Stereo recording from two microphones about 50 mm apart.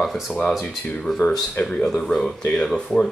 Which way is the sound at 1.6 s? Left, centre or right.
Centre.